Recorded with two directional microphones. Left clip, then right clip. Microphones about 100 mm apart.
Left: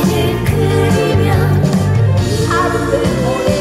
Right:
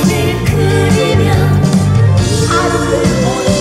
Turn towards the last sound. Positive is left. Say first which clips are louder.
# right 2 dB
turn(degrees=-5)  # may be behind; listen again after turning